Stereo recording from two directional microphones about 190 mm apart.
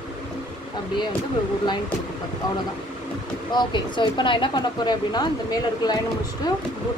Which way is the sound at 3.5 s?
25° left (ahead or behind).